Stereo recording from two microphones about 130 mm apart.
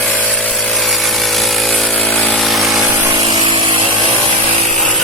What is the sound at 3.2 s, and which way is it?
Vehicle, 35° right (ahead or behind).